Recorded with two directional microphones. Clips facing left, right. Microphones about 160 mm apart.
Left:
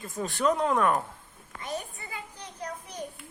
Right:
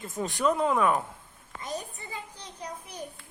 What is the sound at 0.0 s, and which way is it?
Speech, 20° right (ahead or behind).